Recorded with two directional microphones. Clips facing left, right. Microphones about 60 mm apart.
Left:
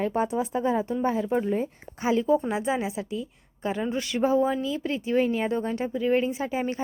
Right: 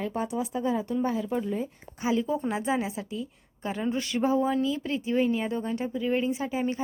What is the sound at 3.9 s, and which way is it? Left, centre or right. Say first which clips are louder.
Speech: left 1 dB; left.